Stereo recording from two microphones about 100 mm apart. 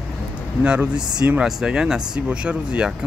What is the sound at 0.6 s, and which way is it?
Speech, 10° right (ahead or behind).